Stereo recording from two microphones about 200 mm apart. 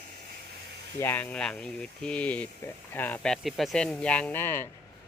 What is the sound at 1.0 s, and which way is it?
Speech, 10° left (ahead or behind).